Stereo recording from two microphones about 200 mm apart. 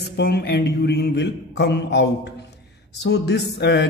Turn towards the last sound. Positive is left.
turn(degrees=60)  # may be behind; listen again after turning